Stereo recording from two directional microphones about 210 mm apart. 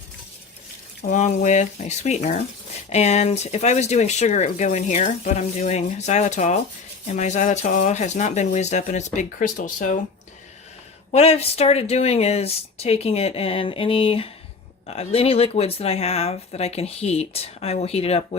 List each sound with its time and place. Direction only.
1.0 s speech: 35° left (ahead or behind)
11.1 s speech: 30° left (ahead or behind)